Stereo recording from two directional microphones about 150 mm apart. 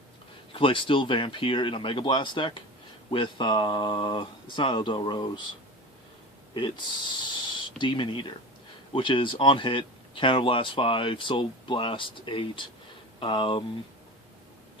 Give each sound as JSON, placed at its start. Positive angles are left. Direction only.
{"t": 0.5, "sound": "speech", "side_deg": 35}
{"t": 6.5, "sound": "speech", "side_deg": 30}